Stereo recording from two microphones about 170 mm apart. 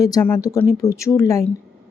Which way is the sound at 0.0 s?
20° left (ahead or behind).